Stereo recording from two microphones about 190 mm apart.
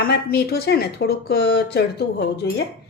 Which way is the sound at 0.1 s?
60° left (ahead or behind).